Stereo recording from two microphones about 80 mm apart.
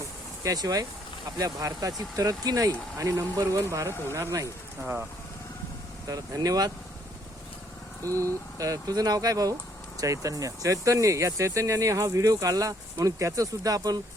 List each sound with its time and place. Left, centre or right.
0.4 s speech: right
4.8 s speech: right
6.1 s speech: right
8.0 s speech: right